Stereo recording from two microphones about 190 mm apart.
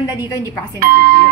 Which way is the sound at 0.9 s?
50° right (ahead or behind).